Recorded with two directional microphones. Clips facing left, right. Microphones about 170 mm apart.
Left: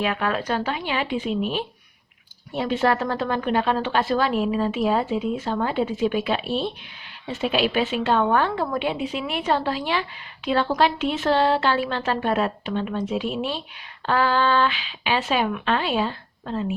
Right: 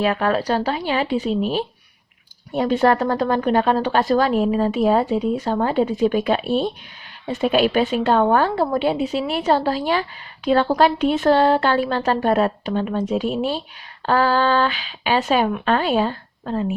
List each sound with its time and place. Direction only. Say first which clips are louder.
0.0 s a woman's voice: right 5 dB; 40° right (ahead or behind)